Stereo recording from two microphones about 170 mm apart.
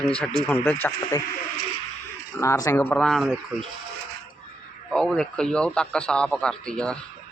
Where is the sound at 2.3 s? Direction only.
20° left (ahead or behind); by 3.3 s centre (ahead or behind).